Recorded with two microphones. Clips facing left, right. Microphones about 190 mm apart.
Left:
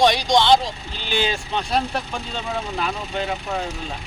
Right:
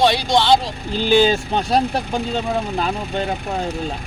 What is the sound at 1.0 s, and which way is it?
Speech, 40° right (ahead or behind).